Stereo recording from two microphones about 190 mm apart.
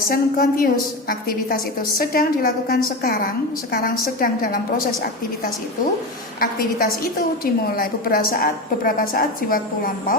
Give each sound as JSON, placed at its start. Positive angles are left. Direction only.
{"t": 0.1, "sound": "a woman's voice", "side_deg": 50}
{"t": 6.4, "sound": "a woman's voice", "side_deg": 50}